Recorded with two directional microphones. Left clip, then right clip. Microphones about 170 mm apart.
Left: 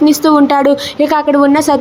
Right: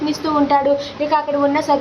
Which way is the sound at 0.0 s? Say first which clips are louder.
Left 9 dB; 50° left (ahead or behind).